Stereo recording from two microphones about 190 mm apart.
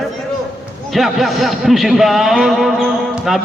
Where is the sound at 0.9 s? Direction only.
Centre (ahead or behind).